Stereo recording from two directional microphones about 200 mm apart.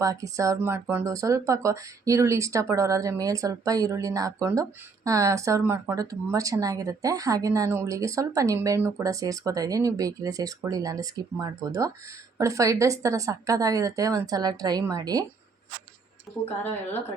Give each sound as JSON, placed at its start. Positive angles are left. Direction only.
{"t": 0.0, "sound": "speech", "side_deg": -15}